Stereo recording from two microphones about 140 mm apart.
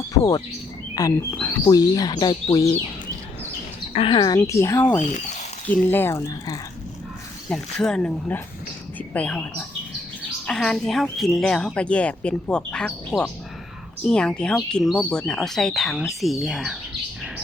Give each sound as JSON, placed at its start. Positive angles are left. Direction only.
{"t": 1.1, "sound": "speech", "side_deg": 15}
{"t": 1.6, "sound": "speech", "side_deg": 30}
{"t": 3.9, "sound": "speech", "side_deg": 40}
{"t": 4.4, "sound": "speech", "side_deg": 20}
{"t": 7.5, "sound": "a woman's voice", "side_deg": 5}